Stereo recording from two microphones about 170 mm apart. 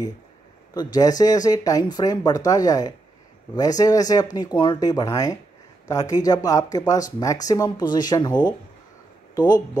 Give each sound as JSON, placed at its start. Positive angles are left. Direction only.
{"t": 0.7, "sound": "speech", "side_deg": 25}